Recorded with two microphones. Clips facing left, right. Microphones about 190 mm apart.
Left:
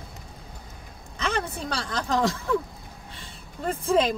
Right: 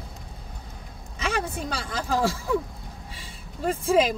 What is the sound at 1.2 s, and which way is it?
Speech, 10° right (ahead or behind).